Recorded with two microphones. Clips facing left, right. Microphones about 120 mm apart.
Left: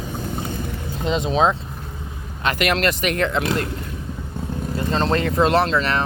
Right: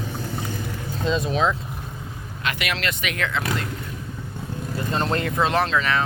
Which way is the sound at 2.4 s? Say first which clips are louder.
Left 7 dB; 45° left (ahead or behind).